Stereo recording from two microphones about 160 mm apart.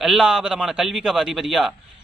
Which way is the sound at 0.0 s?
Centre (ahead or behind).